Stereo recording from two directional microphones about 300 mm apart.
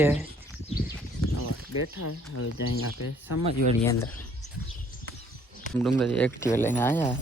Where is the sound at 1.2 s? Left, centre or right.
Left.